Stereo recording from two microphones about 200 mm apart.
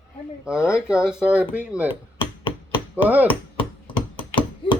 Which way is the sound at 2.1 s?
25° left (ahead or behind).